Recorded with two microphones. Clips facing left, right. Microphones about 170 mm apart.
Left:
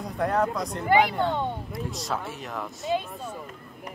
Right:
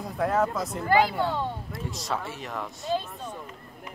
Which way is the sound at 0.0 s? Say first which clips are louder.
Even; centre (ahead or behind).